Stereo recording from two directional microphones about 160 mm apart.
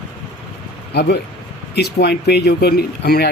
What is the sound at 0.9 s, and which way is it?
Speech, 90° left.